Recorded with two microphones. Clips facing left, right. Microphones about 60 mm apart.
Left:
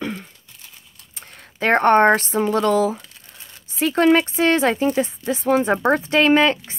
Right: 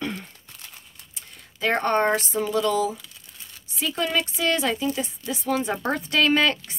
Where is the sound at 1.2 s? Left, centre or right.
Left.